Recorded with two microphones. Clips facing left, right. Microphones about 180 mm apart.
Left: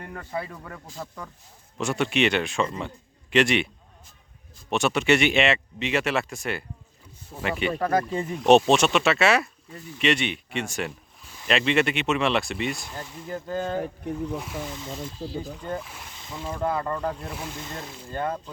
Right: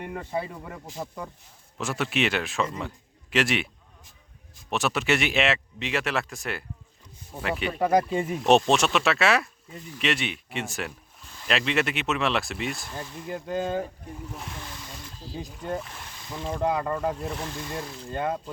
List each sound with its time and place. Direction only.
0.0 s speech: 15° right (ahead or behind)
1.8 s speech: centre (ahead or behind)
4.7 s speech: centre (ahead or behind)
7.8 s speech: 15° right (ahead or behind)
8.4 s speech: centre (ahead or behind)
13.2 s speech: 15° right (ahead or behind)
15.6 s speech: 5° right (ahead or behind)
18.1 s speech: 15° right (ahead or behind)